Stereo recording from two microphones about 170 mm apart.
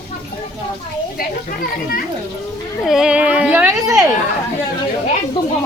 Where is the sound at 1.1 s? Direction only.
60° left (ahead or behind).